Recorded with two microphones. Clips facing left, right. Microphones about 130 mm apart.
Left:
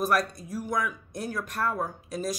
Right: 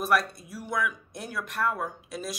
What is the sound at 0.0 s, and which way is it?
Speech, 40° left (ahead or behind).